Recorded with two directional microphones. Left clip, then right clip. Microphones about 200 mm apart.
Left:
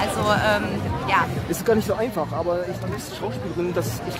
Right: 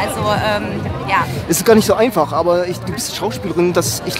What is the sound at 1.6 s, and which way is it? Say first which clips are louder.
Speech: right 10 dB; 40° right (ahead or behind).